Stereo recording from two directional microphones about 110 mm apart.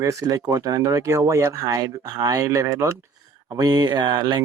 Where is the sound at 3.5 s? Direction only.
40° right (ahead or behind).